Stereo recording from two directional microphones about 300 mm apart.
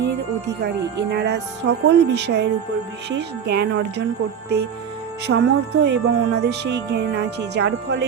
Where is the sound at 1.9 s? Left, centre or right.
Right.